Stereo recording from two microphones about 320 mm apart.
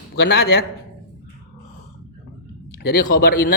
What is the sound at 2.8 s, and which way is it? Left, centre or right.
Speech, left.